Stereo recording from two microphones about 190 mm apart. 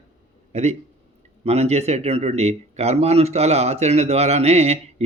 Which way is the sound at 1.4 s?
35° right (ahead or behind).